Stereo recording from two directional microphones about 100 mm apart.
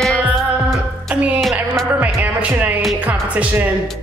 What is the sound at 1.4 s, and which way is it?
Music, centre (ahead or behind).